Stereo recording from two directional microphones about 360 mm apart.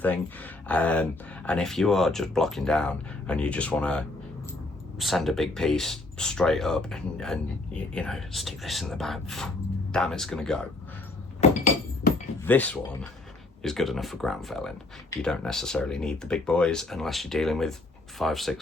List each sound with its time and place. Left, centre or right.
0.7 s speech: centre
11.3 s glass: centre
12.5 s speech: centre